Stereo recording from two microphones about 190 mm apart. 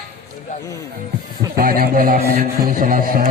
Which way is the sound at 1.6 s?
50° right (ahead or behind).